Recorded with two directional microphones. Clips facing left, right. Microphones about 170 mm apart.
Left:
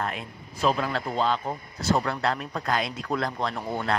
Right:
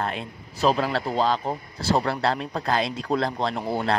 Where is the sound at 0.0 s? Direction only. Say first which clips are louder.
Right 2 dB; 30° right (ahead or behind).